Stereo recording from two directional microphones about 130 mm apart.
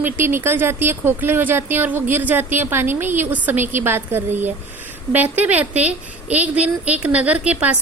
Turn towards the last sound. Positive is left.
turn(degrees=-10)  # may be behind; listen again after turning